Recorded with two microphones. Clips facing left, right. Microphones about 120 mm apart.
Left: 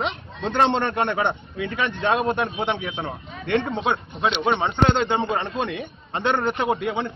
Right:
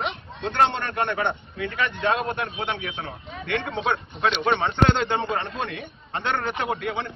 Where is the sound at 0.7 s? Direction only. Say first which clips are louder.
Left 4 dB; 20° left (ahead or behind).